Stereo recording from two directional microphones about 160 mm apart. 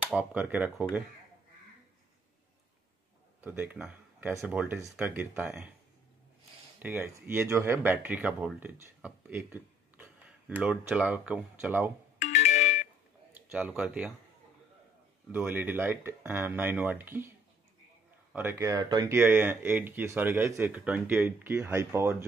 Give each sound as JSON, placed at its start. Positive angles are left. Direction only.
{"t": 0.0, "sound": "speech", "side_deg": -5}
{"t": 3.3, "sound": "speech", "side_deg": -10}
{"t": 6.8, "sound": "speech", "side_deg": -10}
{"t": 12.2, "sound": "music", "side_deg": 45}
{"t": 13.5, "sound": "speech", "side_deg": -5}
{"t": 15.3, "sound": "speech", "side_deg": -10}
{"t": 18.3, "sound": "speech", "side_deg": -15}
{"t": 19.1, "sound": "speech", "side_deg": -15}